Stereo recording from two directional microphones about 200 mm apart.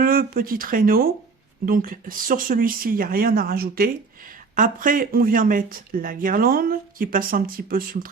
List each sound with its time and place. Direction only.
0.0 s speech: 45° right (ahead or behind)